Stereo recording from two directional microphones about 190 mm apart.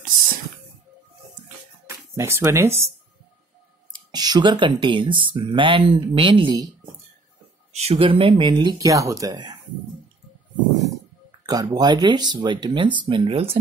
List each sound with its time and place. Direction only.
2.1 s speech: 15° right (ahead or behind)
4.1 s speech: 20° right (ahead or behind)
7.7 s speech: 30° right (ahead or behind)
11.4 s speech: 20° right (ahead or behind)